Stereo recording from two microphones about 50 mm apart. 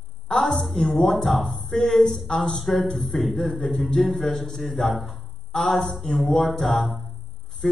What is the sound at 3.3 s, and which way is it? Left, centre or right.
A woman's voice, centre.